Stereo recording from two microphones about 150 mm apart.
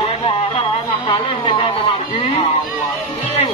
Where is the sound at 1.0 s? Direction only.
35° left (ahead or behind).